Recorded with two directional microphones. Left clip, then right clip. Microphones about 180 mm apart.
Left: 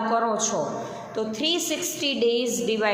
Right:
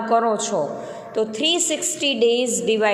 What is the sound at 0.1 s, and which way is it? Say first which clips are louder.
A woman's voice: right 7 dB; 30° right (ahead or behind).